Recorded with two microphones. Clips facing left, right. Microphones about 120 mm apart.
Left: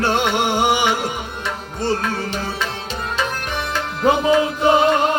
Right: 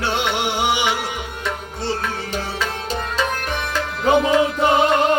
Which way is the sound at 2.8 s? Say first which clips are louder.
Right 2 dB; 40° right (ahead or behind).